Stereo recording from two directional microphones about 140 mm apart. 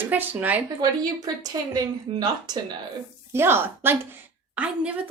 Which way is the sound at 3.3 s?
15° right (ahead or behind).